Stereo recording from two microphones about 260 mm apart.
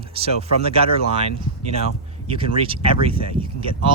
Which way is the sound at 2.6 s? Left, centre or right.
Right.